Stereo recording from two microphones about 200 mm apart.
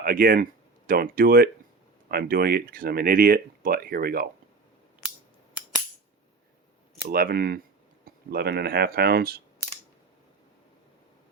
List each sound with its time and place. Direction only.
0.0 s speech: 45° right (ahead or behind)
7.1 s speech: 50° right (ahead or behind)